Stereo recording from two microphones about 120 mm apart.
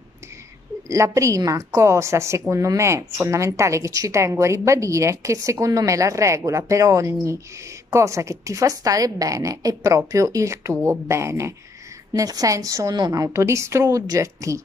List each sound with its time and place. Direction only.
0.8 s a woman's voice: 25° right (ahead or behind)